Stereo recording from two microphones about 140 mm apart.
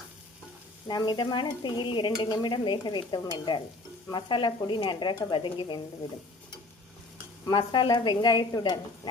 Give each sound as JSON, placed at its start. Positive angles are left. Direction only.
{"t": 0.9, "sound": "speech", "side_deg": 30}
{"t": 7.4, "sound": "speech", "side_deg": 30}